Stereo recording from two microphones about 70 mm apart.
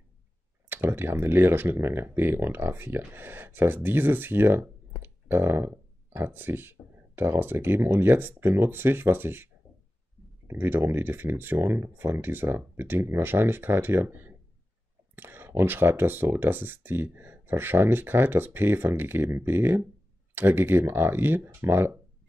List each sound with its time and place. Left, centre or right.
0.7 s speech: right